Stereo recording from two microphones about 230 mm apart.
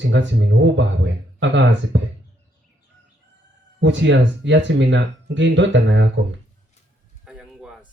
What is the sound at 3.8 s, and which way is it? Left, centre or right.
Speech, right.